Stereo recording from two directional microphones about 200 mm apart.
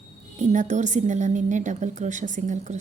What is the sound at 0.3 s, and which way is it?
A woman's voice, 35° right (ahead or behind).